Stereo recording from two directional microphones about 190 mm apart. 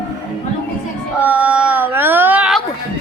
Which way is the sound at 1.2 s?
10° right (ahead or behind).